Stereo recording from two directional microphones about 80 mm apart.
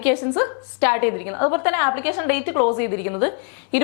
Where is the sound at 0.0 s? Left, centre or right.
Centre.